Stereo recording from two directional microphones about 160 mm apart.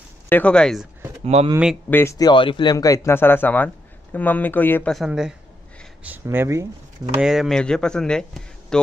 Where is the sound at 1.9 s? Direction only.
20° left (ahead or behind).